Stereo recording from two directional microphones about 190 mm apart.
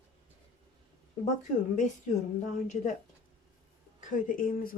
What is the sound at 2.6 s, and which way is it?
Speech, 40° left (ahead or behind).